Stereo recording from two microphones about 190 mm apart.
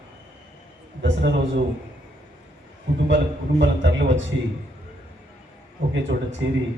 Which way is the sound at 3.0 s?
70° right (ahead or behind).